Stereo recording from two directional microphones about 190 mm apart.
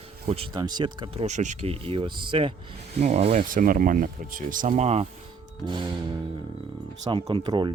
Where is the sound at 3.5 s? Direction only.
45° right (ahead or behind); by 5.9 s 25° right (ahead or behind).